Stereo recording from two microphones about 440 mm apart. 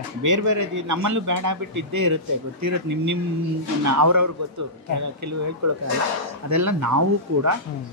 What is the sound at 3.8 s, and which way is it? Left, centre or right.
Speech, right.